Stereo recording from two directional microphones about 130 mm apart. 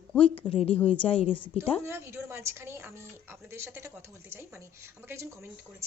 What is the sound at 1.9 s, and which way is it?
A woman's voice, 20° right (ahead or behind).